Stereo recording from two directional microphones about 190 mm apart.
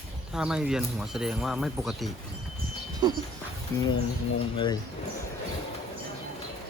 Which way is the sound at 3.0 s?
20° right (ahead or behind).